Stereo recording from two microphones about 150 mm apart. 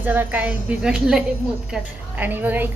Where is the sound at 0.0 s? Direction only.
10° right (ahead or behind).